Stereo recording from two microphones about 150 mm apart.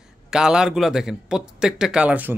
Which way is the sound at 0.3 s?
5° right (ahead or behind).